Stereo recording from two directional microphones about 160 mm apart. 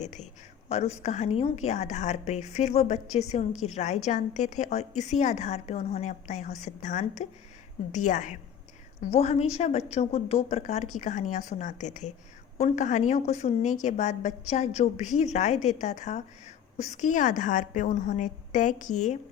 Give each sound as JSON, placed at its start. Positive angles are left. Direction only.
{"t": 0.7, "sound": "a woman's voice", "side_deg": 40}